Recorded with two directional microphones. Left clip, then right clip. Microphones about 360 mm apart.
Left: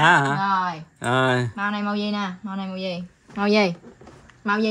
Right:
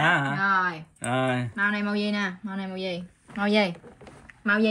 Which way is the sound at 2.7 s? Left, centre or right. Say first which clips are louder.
Left 2 dB; left.